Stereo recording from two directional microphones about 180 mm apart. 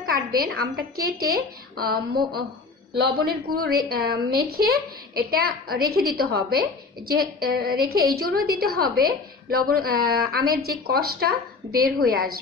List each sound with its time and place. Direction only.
0.0 s speech: 55° right (ahead or behind)